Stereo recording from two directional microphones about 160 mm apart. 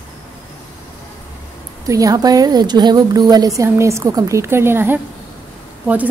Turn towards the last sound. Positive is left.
turn(degrees=-10)  # may be behind; listen again after turning